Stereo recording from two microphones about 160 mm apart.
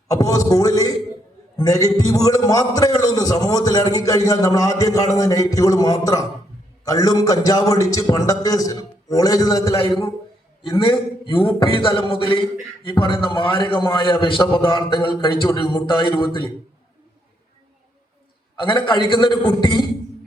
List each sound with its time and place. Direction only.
0.1 s a man's voice: 20° left (ahead or behind)
18.6 s a man's voice: 30° left (ahead or behind)